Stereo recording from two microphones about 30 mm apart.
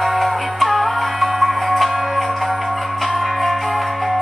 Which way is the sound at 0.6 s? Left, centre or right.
Centre.